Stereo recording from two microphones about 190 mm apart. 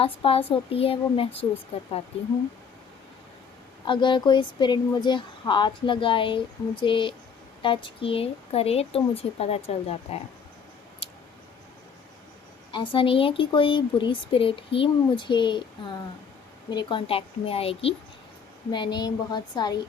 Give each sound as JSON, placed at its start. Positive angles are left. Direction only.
{"t": 0.0, "sound": "speech", "side_deg": 30}
{"t": 3.8, "sound": "speech", "side_deg": 25}
{"t": 12.7, "sound": "speech", "side_deg": 25}